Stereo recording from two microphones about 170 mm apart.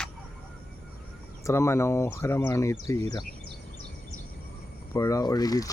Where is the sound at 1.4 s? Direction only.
15° left (ahead or behind).